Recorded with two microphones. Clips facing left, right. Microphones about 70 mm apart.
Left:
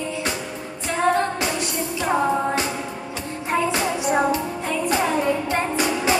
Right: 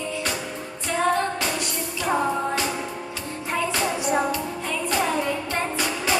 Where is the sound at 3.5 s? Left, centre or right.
Left.